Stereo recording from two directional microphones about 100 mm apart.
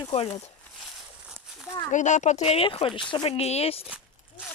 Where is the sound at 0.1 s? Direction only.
80° left.